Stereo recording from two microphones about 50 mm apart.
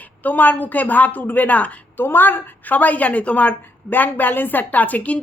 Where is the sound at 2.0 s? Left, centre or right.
Left.